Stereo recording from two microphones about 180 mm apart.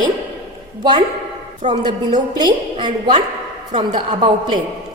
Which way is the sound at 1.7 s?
25° right (ahead or behind).